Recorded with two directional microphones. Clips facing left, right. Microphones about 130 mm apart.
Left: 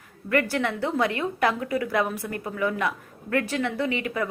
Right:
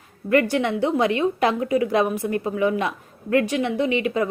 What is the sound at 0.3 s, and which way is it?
A woman's voice, 20° right (ahead or behind).